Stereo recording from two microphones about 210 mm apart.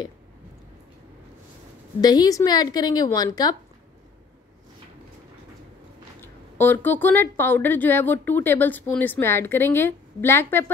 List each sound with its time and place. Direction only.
2.0 s a woman's voice: 20° left (ahead or behind)
6.2 s a woman's voice: 10° left (ahead or behind)